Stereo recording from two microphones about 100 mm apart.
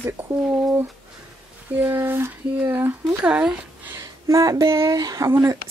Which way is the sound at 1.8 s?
20° right (ahead or behind).